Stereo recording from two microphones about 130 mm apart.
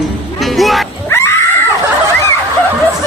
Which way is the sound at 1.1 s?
20° left (ahead or behind).